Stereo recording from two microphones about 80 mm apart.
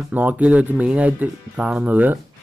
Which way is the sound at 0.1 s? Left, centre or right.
Right.